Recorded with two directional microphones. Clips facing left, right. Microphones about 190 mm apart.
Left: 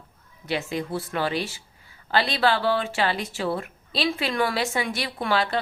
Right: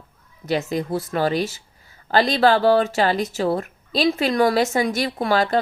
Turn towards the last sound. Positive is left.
turn(degrees=-45)  # may be behind; listen again after turning